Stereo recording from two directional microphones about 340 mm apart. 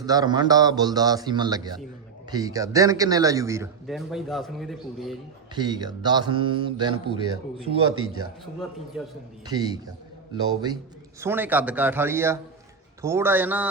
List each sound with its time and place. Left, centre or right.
0.0 s speech: centre
5.5 s speech: centre
7.9 s a man's voice: right
9.5 s a man's voice: centre